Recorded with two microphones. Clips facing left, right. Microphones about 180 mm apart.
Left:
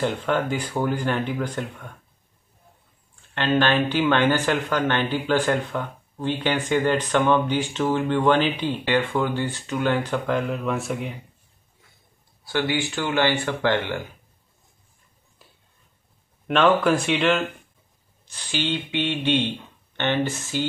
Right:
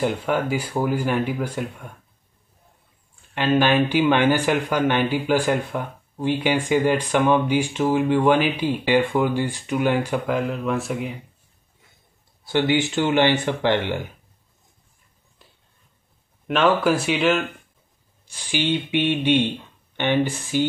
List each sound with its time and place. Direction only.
0.0 s speech: 10° right (ahead or behind)
3.3 s speech: 10° right (ahead or behind)
12.4 s speech: 20° right (ahead or behind)
16.4 s speech: centre (ahead or behind)